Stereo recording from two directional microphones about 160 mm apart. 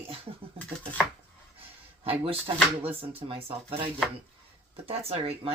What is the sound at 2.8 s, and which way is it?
Speech, 40° right (ahead or behind).